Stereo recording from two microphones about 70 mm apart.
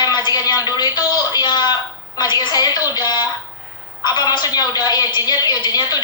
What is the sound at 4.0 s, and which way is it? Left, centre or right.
A woman's voice, left.